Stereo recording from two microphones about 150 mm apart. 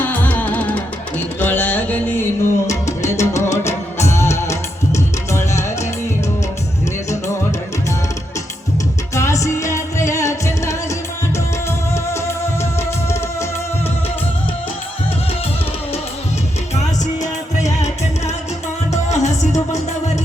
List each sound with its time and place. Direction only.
0.0 s music: 10° left (ahead or behind)
9.1 s music: 20° left (ahead or behind)
18.9 s music: 50° left (ahead or behind)